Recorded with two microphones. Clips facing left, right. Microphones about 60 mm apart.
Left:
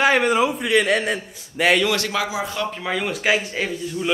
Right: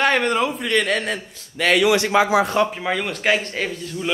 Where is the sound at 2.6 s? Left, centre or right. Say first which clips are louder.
Right 1 dB; centre.